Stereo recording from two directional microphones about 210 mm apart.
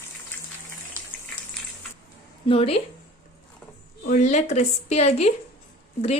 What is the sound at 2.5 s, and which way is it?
Speech, 30° left (ahead or behind).